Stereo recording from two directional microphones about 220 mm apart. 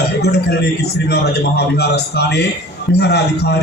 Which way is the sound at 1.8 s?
50° left (ahead or behind).